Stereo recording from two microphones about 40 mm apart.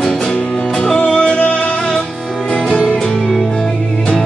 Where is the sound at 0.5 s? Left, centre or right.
Centre.